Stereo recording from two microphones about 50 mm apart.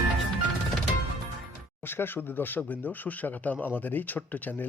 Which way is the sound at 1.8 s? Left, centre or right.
Left.